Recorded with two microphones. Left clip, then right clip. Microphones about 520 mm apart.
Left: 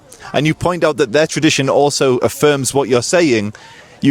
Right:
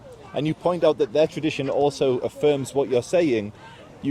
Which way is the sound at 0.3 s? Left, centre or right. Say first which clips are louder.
Left 11 dB; left.